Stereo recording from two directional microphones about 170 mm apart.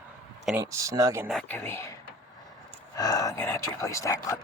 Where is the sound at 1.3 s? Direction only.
5° left (ahead or behind).